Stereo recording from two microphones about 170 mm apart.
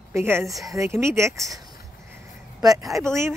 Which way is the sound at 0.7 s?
15° right (ahead or behind).